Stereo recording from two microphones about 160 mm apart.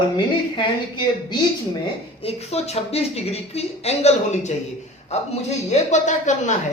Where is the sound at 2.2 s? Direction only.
40° left (ahead or behind).